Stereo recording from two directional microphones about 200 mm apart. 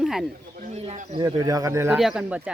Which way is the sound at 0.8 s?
30° right (ahead or behind).